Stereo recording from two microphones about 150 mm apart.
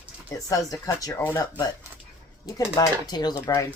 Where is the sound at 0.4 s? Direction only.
25° left (ahead or behind).